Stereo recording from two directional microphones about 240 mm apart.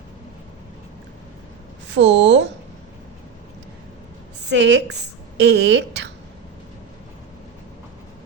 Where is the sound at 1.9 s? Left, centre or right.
Right.